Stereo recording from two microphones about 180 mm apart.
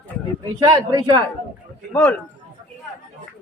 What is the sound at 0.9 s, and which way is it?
Speech, 20° right (ahead or behind).